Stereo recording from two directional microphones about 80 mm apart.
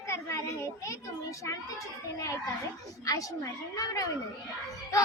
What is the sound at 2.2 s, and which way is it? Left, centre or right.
A child's voice, left.